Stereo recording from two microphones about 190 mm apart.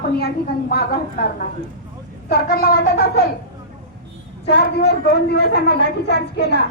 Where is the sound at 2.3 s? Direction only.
50° left (ahead or behind).